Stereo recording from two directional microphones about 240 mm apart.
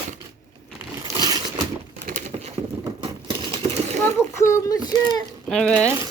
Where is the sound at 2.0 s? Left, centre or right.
Right.